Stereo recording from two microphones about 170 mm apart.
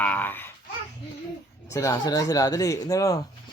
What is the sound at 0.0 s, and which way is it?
Babbling, 10° left (ahead or behind).